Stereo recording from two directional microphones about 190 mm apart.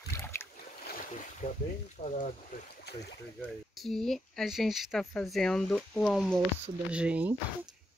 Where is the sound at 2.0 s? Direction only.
45° left (ahead or behind).